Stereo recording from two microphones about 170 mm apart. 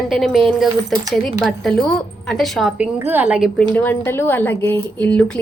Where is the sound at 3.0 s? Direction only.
10° right (ahead or behind).